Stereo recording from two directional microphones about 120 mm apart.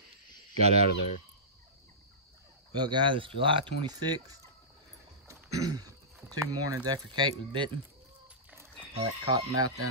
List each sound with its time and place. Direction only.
0.6 s speech: 65° right (ahead or behind)
2.7 s speech: 40° right (ahead or behind)
5.3 s throat clearing: 30° right (ahead or behind)
6.3 s speech: 30° right (ahead or behind)
9.2 s speech: 30° right (ahead or behind)